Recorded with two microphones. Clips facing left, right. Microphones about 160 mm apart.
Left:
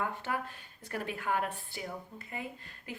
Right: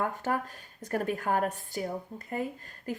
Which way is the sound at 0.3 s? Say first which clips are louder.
Right 5 dB; 45° right (ahead or behind).